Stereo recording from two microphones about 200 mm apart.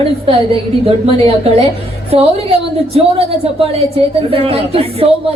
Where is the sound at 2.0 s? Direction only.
30° right (ahead or behind).